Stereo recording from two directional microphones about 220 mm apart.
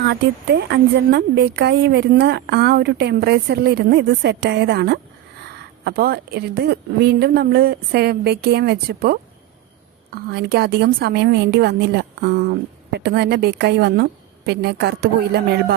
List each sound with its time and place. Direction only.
0.0 s speech: 50° right (ahead or behind)